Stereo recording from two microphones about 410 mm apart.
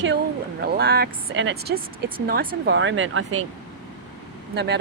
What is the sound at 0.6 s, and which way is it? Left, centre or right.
Speech, right.